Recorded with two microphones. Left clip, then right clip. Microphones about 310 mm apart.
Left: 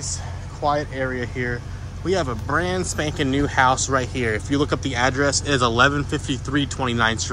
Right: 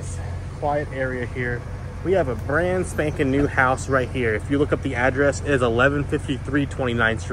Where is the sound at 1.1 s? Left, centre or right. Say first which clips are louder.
Left 1 dB; left.